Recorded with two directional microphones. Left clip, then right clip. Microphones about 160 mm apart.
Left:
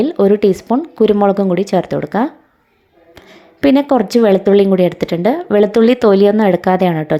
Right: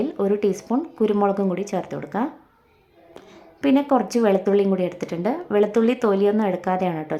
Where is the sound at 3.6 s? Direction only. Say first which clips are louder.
Left 7 dB; 35° left (ahead or behind).